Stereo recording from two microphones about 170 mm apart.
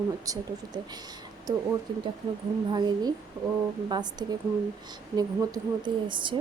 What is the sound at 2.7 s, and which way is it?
Speech, 25° right (ahead or behind).